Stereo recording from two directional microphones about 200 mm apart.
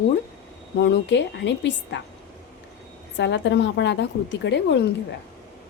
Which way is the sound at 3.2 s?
60° left (ahead or behind).